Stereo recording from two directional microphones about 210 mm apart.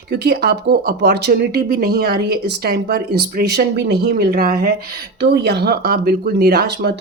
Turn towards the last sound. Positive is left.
turn(degrees=-50)  # may be behind; listen again after turning